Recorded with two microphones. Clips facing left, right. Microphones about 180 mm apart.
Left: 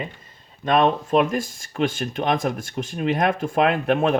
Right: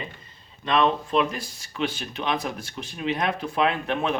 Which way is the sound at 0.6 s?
45° left (ahead or behind).